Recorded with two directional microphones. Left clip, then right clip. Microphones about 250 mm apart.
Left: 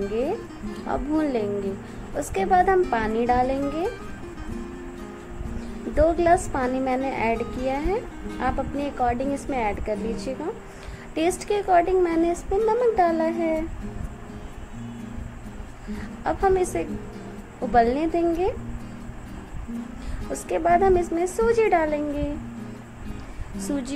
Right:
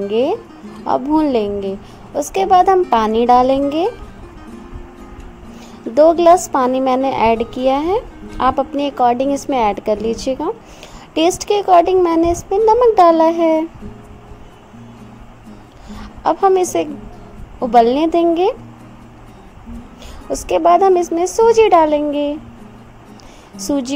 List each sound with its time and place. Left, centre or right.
0.1 s speech: right
5.9 s speech: right
16.3 s speech: right
20.4 s speech: right